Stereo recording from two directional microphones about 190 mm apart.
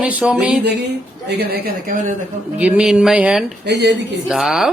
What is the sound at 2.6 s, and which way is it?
Speech, 5° right (ahead or behind).